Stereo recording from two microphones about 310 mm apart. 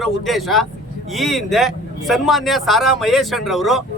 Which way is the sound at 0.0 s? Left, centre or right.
Centre.